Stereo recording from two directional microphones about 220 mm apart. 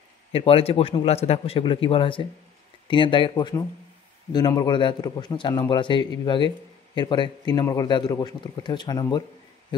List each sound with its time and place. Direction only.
0.3 s a man's voice: 25° left (ahead or behind)